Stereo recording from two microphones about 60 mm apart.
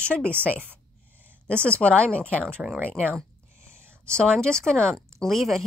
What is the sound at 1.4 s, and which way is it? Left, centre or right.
A woman's voice, centre.